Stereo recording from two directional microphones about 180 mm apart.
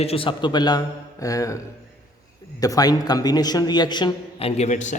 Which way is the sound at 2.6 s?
20° left (ahead or behind).